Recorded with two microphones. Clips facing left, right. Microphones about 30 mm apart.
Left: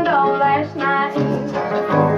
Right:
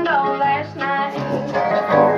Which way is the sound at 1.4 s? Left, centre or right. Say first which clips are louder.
Right 2 dB; right.